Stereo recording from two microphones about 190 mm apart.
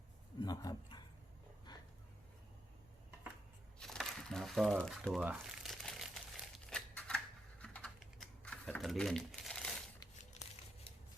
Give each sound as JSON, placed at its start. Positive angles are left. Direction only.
{"t": 0.4, "sound": "speech", "side_deg": 20}
{"t": 1.7, "sound": "a sound", "side_deg": 20}
{"t": 3.8, "sound": "crumpling", "side_deg": 0}
{"t": 6.7, "sound": "scissors", "side_deg": 5}
{"t": 7.6, "sound": "typing", "side_deg": 5}
{"t": 10.4, "sound": "a sound", "side_deg": 35}